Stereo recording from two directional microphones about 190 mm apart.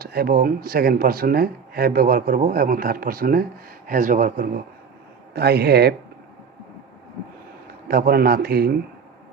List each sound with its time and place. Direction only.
0.0 s speech: 55° right (ahead or behind)
7.7 s speech: 55° right (ahead or behind)